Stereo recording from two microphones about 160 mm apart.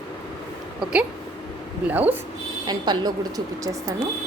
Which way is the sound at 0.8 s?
5° right (ahead or behind).